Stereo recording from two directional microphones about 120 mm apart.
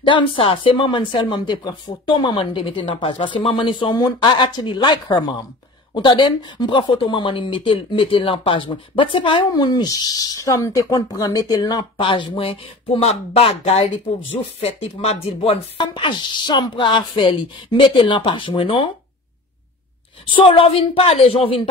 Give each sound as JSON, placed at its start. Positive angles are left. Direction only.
{"t": 0.0, "sound": "speech", "side_deg": 45}
{"t": 9.5, "sound": "speech", "side_deg": 35}
{"t": 15.8, "sound": "speech", "side_deg": 40}
{"t": 20.2, "sound": "speech", "side_deg": 45}